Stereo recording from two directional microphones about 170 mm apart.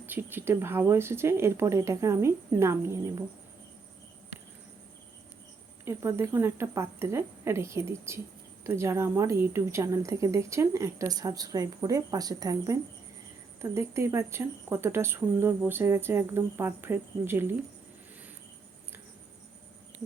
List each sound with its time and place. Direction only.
0.0 s a woman's voice: 10° right (ahead or behind)
5.8 s a woman's voice: 15° right (ahead or behind)